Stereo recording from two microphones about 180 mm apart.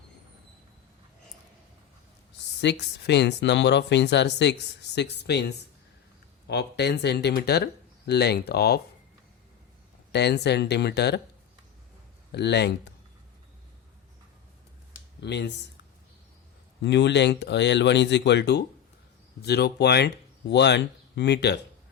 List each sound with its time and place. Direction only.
2.6 s speech: 75° left (ahead or behind)
10.1 s speech: 70° left (ahead or behind)
12.3 s speech: 70° left (ahead or behind)
15.2 s speech: 75° left (ahead or behind)
16.8 s speech: 70° left (ahead or behind)